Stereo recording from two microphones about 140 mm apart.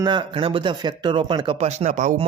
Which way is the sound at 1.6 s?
50° right (ahead or behind).